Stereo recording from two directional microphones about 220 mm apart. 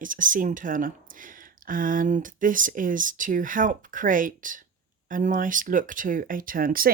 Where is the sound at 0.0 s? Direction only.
35° right (ahead or behind).